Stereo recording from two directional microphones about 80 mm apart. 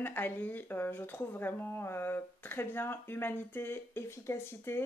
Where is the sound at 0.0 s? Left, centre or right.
Left.